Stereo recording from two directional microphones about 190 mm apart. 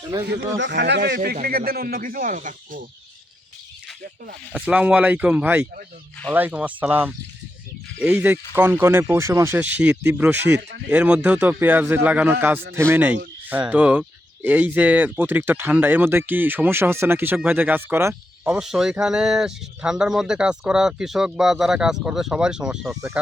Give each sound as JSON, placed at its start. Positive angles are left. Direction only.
{"t": 0.3, "sound": "speech", "side_deg": -70}
{"t": 4.5, "sound": "speech", "side_deg": -5}
{"t": 10.6, "sound": "speech", "side_deg": -65}
{"t": 10.8, "sound": "speech", "side_deg": -5}